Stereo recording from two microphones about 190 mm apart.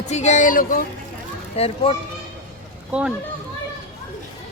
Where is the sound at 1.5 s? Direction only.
30° left (ahead or behind).